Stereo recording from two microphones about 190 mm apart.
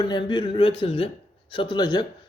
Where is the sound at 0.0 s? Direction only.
25° left (ahead or behind).